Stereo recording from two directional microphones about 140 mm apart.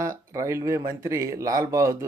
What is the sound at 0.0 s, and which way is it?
Speech, 20° right (ahead or behind).